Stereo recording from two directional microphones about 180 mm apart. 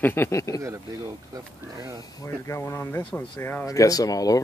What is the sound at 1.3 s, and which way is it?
Speech, 20° right (ahead or behind).